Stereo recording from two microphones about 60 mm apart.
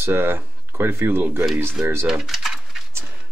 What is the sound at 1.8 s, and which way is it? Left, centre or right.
Speech, right.